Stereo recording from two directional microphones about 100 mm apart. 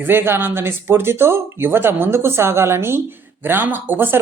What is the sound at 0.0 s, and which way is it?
Speech, 20° right (ahead or behind).